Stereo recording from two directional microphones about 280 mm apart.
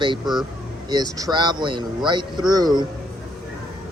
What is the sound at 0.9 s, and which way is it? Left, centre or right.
Speech, centre.